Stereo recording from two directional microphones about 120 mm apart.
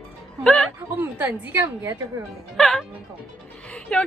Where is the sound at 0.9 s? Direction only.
15° right (ahead or behind).